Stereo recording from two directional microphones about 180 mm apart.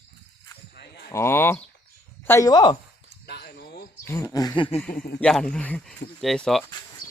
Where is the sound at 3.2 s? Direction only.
65° left (ahead or behind).